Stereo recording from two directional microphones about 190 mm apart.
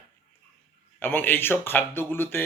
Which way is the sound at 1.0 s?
10° left (ahead or behind).